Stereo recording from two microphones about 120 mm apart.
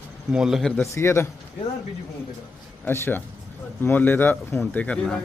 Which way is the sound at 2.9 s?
20° left (ahead or behind).